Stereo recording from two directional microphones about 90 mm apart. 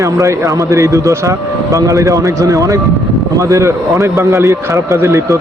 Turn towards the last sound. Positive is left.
turn(degrees=-30)  # may be behind; listen again after turning